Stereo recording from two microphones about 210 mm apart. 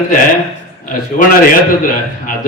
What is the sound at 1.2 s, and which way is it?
Speech, 40° left (ahead or behind).